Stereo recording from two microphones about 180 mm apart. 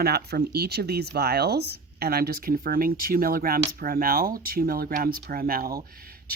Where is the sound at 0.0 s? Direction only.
60° right (ahead or behind).